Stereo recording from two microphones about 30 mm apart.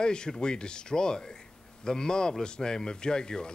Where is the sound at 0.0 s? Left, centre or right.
Left.